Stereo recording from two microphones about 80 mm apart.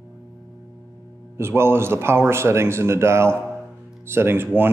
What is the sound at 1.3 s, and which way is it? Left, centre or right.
A man's voice, right.